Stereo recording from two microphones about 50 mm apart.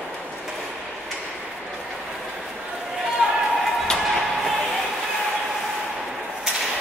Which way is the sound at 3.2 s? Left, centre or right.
Centre.